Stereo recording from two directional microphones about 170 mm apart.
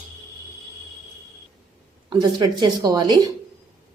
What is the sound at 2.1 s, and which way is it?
Speech, 25° right (ahead or behind).